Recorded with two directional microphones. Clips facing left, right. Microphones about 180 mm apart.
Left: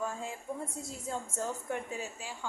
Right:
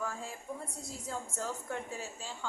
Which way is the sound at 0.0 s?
20° left (ahead or behind).